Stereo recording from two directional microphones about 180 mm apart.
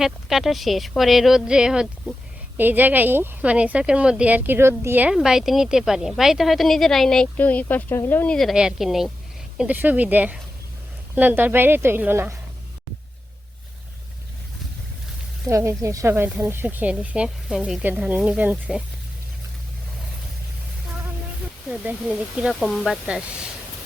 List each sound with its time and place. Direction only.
0.0 s speech: centre (ahead or behind)
15.4 s speech: 15° right (ahead or behind)
21.7 s speech: 5° right (ahead or behind)